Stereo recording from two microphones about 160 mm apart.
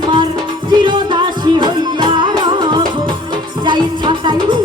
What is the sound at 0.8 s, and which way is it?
Music, 30° right (ahead or behind).